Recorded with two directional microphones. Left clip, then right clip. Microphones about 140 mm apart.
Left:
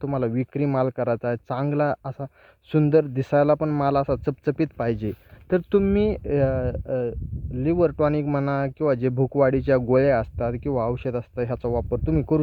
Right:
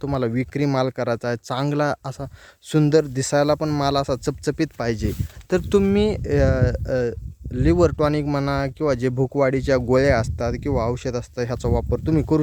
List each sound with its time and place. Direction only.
0.0 s speech: 35° right (ahead or behind); by 7.9 s 55° right (ahead or behind)
7.9 s speech: 30° right (ahead or behind)